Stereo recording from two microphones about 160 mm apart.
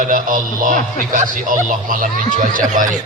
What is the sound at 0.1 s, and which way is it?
Speech, 60° right (ahead or behind).